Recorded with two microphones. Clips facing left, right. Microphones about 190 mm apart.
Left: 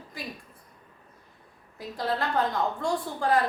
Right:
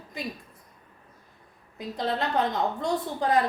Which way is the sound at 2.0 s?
20° right (ahead or behind).